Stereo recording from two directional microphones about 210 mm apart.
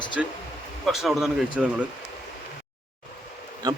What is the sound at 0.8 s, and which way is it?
Speech, centre (ahead or behind).